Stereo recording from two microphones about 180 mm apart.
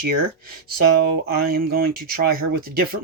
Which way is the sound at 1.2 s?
55° right (ahead or behind).